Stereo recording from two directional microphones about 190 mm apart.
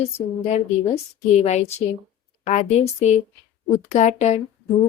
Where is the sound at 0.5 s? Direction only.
35° left (ahead or behind).